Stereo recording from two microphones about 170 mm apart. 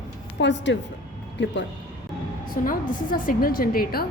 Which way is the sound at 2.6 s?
55° left (ahead or behind).